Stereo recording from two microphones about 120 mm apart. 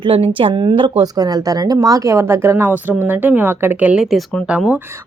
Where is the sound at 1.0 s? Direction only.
30° right (ahead or behind); by 4.8 s 10° right (ahead or behind).